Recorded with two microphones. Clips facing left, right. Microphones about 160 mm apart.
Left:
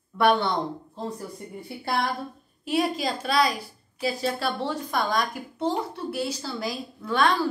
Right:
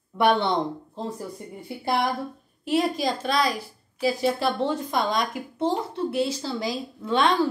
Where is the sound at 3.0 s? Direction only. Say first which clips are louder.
Right 2 dB; 5° left (ahead or behind).